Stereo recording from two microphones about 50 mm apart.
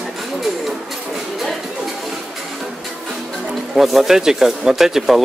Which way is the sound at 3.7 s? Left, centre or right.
Centre.